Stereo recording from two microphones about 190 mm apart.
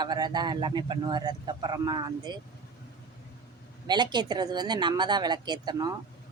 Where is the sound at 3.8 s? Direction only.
25° right (ahead or behind).